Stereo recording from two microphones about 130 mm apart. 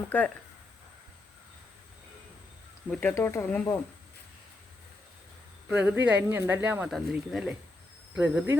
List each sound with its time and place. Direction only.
0.1 s speech: 10° left (ahead or behind)
2.9 s speech: 10° left (ahead or behind)
5.6 s speech: 10° right (ahead or behind)
6.9 s speech: centre (ahead or behind)